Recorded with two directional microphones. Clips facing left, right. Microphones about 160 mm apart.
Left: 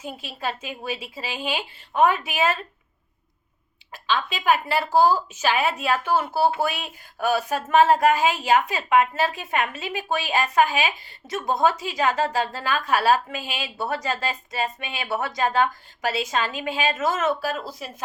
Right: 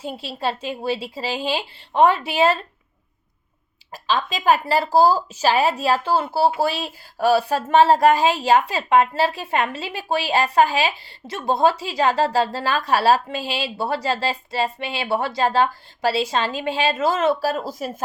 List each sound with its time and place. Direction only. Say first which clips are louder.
0.0 s speech: right 5 dB; 35° right (ahead or behind)
3.9 s speech: right 3 dB; 40° right (ahead or behind)